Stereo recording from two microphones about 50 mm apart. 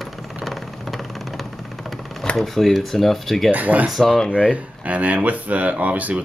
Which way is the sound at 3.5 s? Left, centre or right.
Right.